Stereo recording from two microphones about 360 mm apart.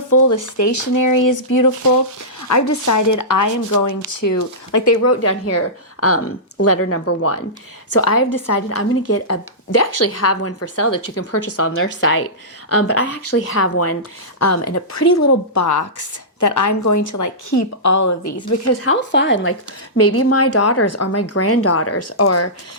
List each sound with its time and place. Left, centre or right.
0.1 s a woman's voice: left